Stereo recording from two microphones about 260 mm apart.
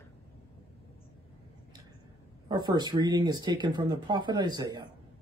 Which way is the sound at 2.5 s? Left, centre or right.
Centre.